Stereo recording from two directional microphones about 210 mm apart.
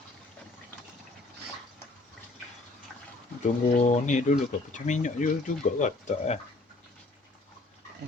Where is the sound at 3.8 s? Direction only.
35° left (ahead or behind).